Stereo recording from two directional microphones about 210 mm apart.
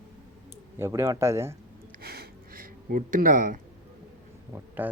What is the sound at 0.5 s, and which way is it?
Speech, 10° right (ahead or behind).